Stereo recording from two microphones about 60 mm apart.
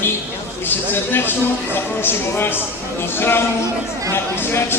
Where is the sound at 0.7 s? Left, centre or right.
Left.